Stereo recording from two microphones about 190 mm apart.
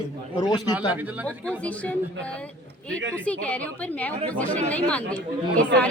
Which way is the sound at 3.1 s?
5° left (ahead or behind).